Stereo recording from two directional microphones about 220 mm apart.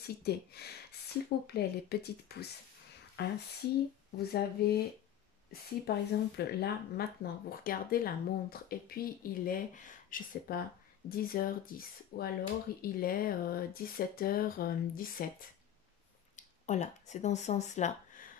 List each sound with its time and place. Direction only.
0.0 s speech: 45° left (ahead or behind)
16.3 s speech: 30° left (ahead or behind)